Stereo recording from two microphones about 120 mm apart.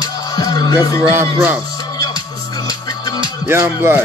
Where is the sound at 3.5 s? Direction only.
20° right (ahead or behind).